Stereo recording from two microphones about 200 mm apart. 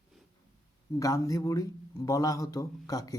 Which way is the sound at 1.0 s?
15° left (ahead or behind).